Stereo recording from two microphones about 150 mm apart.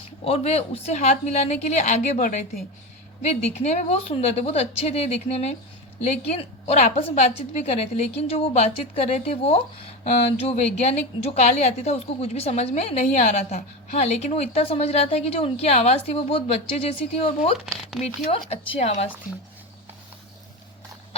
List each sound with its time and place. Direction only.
0.3 s a woman's voice: 40° left (ahead or behind)